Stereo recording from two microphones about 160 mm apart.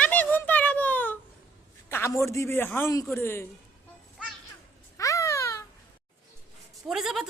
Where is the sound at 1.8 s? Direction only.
15° left (ahead or behind).